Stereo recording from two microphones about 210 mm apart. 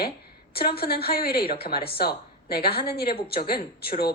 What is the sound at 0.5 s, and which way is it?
A man's voice, 45° left (ahead or behind).